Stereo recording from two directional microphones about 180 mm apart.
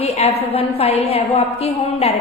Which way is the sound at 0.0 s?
35° left (ahead or behind).